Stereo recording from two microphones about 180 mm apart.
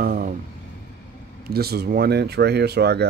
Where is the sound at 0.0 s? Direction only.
55° right (ahead or behind).